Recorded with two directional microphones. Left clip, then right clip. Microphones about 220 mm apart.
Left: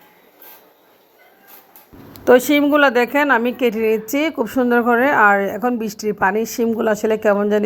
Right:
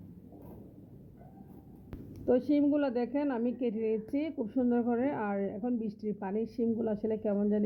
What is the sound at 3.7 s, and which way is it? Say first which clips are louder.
Speech: left 15 dB; 20° left (ahead or behind).